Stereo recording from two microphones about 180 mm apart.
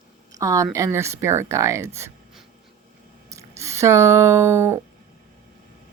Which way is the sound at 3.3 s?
15° right (ahead or behind).